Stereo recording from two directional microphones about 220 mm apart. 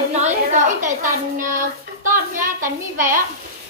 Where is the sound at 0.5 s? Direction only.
35° right (ahead or behind).